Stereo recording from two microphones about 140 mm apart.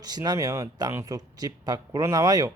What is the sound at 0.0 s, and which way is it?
Speech, 30° right (ahead or behind).